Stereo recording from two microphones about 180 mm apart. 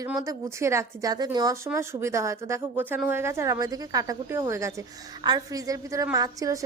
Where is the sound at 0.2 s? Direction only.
15° right (ahead or behind).